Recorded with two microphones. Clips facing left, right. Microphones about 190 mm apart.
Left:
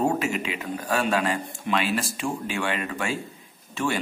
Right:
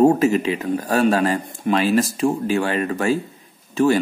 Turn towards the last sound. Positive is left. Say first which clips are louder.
# right 10 dB
turn(degrees=-40)  # may be behind; listen again after turning